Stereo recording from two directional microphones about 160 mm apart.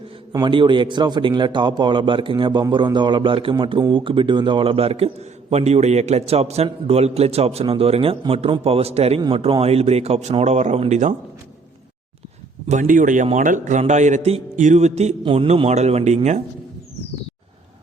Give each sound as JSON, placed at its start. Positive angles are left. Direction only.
{"t": 0.3, "sound": "a man's voice", "side_deg": -30}
{"t": 12.6, "sound": "speech", "side_deg": -50}
{"t": 15.2, "sound": "a man's voice", "side_deg": -35}